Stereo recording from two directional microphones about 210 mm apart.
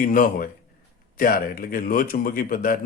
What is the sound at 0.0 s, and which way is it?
Speech, 40° left (ahead or behind).